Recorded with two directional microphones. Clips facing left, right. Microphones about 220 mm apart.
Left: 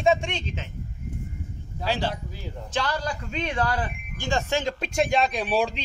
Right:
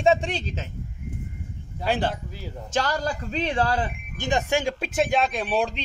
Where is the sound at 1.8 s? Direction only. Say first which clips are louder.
Right 2 dB; 55° right (ahead or behind).